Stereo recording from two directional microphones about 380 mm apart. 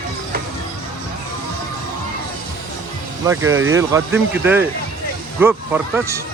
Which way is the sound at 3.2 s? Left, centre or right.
Centre.